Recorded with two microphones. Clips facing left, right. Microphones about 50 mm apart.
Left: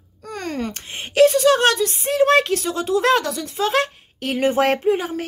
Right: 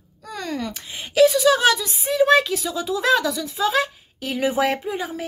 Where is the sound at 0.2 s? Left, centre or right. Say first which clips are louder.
Left 2 dB; left.